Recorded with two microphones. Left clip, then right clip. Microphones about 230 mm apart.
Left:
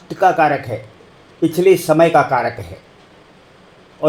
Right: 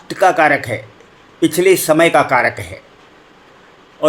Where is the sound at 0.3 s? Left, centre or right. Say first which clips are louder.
Right 2 dB; right.